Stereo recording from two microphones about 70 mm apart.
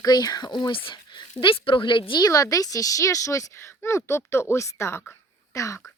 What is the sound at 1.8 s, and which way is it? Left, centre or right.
A woman's voice, left.